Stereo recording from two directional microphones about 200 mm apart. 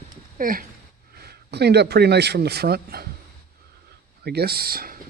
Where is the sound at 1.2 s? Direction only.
55° right (ahead or behind).